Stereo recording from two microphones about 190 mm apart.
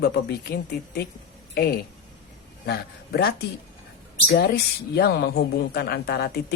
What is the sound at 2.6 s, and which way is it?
Speech, 55° left (ahead or behind).